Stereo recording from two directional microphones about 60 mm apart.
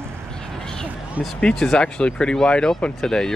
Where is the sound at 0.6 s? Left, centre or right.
Centre.